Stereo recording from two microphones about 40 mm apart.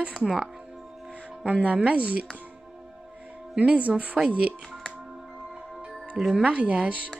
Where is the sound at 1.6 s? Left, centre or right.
Right.